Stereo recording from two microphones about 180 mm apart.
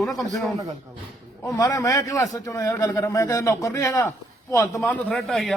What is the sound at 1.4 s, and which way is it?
A man's voice, 20° left (ahead or behind).